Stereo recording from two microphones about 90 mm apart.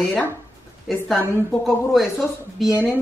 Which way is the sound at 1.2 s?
25° left (ahead or behind).